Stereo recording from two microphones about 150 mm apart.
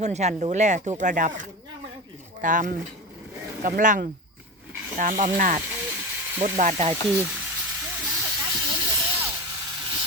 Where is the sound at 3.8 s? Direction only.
60° right (ahead or behind).